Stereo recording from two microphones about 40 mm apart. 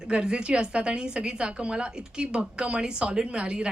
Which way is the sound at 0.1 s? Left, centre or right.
Right.